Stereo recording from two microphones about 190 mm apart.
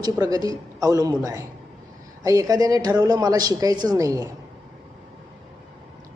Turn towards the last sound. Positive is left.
turn(degrees=-15)  # may be behind; listen again after turning